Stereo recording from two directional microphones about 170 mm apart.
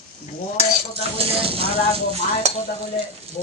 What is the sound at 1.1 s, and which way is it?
Speech, 35° right (ahead or behind).